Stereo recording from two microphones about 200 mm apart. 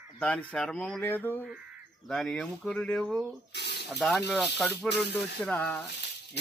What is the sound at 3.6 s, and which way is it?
Snake, 55° left (ahead or behind).